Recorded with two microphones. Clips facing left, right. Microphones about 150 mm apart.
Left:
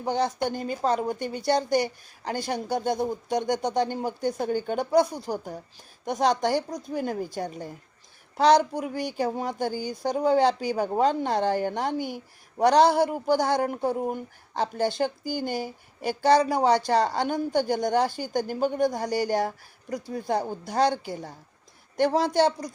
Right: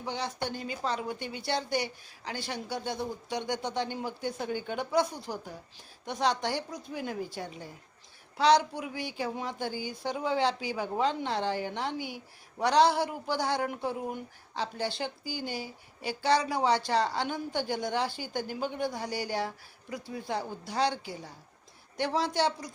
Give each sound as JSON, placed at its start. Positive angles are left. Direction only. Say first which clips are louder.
{"t": 0.0, "sound": "speech", "louder": "left 8 dB", "side_deg": 45}